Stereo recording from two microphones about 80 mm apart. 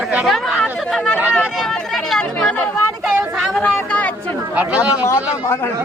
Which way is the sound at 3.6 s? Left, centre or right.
Centre.